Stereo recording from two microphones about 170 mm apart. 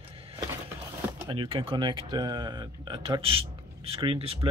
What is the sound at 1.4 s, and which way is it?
Speech, 30° right (ahead or behind).